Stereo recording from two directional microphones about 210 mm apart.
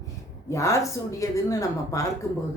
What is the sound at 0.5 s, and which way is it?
Speech, 15° left (ahead or behind).